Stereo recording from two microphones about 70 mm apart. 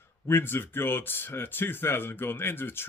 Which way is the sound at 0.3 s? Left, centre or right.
Left.